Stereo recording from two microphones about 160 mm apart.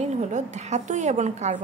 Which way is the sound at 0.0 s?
45° right (ahead or behind).